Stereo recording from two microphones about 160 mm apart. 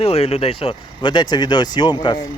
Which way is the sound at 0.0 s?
40° left (ahead or behind).